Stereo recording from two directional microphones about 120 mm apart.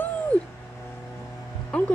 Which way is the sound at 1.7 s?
10° left (ahead or behind).